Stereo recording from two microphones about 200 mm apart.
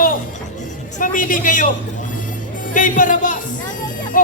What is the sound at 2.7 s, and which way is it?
Speech, 40° left (ahead or behind).